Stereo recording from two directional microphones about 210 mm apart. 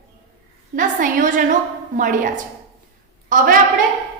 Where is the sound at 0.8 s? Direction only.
40° right (ahead or behind).